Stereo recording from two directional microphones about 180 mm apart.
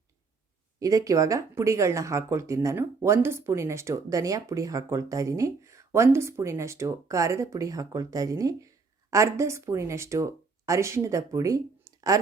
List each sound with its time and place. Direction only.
0.8 s speech: 20° right (ahead or behind)